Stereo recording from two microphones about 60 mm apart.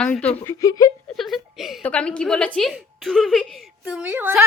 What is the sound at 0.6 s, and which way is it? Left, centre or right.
Speech, left.